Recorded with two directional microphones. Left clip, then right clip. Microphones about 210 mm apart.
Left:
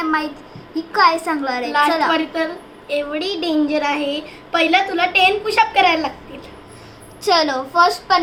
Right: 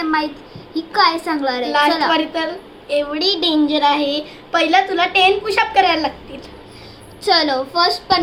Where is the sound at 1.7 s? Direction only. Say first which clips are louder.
Even; 15° right (ahead or behind).